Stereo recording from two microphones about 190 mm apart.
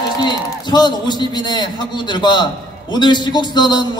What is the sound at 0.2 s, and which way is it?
A man's voice, 20° left (ahead or behind).